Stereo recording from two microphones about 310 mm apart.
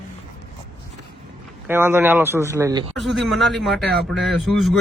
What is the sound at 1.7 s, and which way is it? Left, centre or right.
Speech, centre.